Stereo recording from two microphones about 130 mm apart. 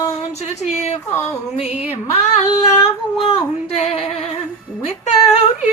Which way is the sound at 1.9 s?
55° left (ahead or behind).